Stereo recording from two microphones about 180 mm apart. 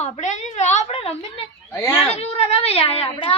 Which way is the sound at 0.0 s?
40° left (ahead or behind).